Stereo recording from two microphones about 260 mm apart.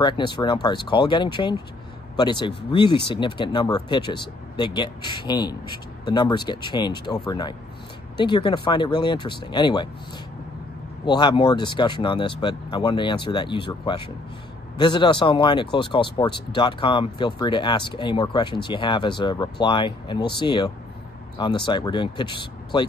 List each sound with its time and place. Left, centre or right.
0.0 s speech: centre
11.1 s speech: centre